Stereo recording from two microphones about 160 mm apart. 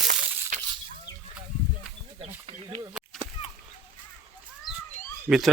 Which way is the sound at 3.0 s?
5° right (ahead or behind).